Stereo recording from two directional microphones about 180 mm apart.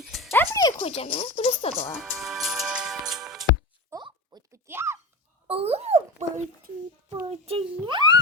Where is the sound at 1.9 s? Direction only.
Centre (ahead or behind).